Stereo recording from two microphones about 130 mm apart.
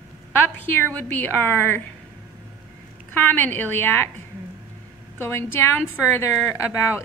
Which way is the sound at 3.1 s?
15° left (ahead or behind).